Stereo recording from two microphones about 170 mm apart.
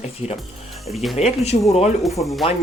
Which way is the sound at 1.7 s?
40° left (ahead or behind).